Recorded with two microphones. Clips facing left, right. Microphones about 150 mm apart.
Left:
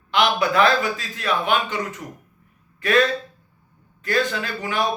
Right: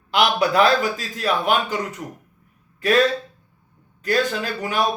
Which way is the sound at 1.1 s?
40° right (ahead or behind).